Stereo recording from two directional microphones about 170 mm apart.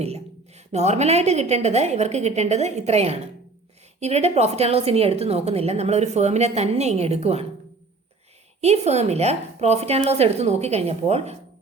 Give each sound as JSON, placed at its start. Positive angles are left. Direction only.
{"t": 0.0, "sound": "a woman's voice", "side_deg": -40}
{"t": 8.6, "sound": "a woman's voice", "side_deg": -40}